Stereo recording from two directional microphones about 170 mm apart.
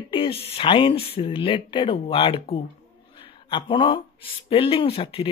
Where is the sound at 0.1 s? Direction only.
35° left (ahead or behind).